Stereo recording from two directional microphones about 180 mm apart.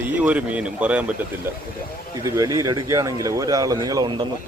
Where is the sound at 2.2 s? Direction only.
15° right (ahead or behind).